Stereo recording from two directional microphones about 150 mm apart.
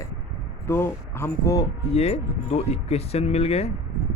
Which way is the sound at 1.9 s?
45° left (ahead or behind).